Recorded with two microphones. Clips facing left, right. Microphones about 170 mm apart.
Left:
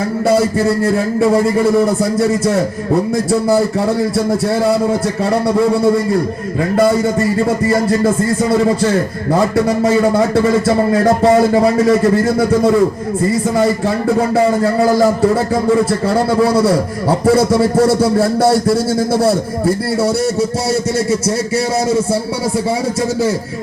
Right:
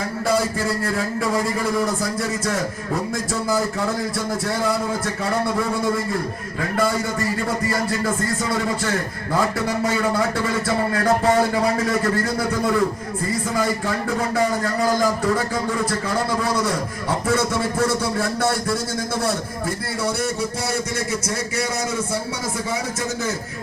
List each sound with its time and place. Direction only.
0.3 s a man's voice: 25° left (ahead or behind)
9.8 s a man's voice: 30° left (ahead or behind)
17.2 s speech: 30° left (ahead or behind)